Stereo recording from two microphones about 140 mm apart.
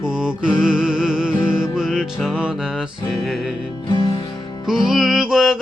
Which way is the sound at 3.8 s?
35° left (ahead or behind).